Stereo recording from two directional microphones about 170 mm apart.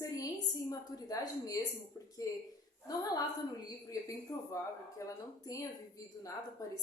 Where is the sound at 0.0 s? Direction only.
20° left (ahead or behind).